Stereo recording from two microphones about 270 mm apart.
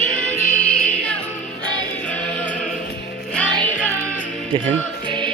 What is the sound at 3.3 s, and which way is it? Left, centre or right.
Music, centre.